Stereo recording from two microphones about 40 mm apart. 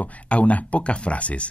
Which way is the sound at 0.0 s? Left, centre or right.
Left.